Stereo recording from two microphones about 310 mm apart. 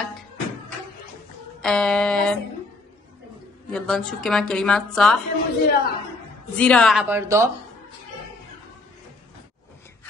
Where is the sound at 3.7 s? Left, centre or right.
Centre.